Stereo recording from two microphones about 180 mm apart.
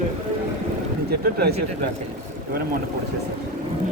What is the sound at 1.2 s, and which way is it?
Speech, 60° right (ahead or behind).